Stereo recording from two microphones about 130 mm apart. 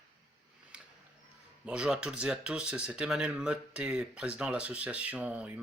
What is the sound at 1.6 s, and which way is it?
Speech, 5° right (ahead or behind).